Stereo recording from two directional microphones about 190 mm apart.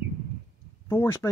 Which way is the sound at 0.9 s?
10° left (ahead or behind).